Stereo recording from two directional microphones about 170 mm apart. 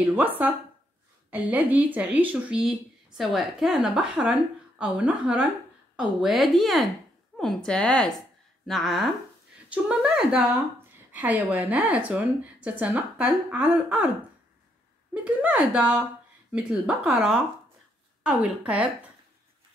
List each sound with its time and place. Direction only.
0.1 s a woman's voice: 10° right (ahead or behind)
15.2 s a woman's voice: 5° right (ahead or behind)